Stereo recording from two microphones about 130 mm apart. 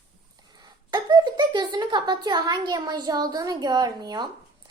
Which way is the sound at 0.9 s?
30° right (ahead or behind).